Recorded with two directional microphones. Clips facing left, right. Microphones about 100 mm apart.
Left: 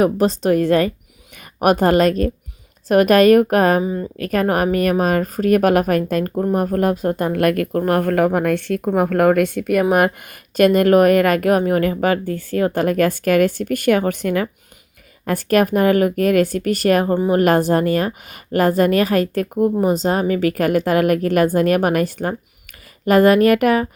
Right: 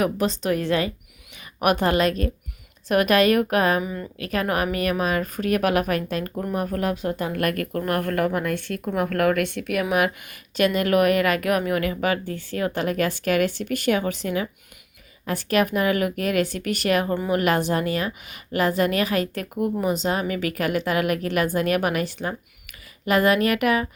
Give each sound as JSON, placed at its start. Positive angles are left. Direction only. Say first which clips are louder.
{"t": 0.0, "sound": "a woman's voice", "louder": "left 7 dB", "side_deg": 40}
{"t": 3.8, "sound": "a woman's voice", "louder": "left 8 dB", "side_deg": 30}
{"t": 4.2, "sound": "a woman's voice", "louder": "left 6 dB", "side_deg": 45}
{"t": 7.7, "sound": "a woman's voice", "louder": "left 7 dB", "side_deg": 35}
{"t": 10.6, "sound": "a woman's voice", "louder": "left 7 dB", "side_deg": 45}